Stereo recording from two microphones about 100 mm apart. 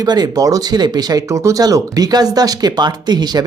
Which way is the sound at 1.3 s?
35° right (ahead or behind).